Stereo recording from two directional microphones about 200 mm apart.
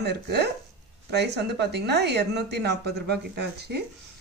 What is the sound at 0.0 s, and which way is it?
A woman's voice, 55° right (ahead or behind).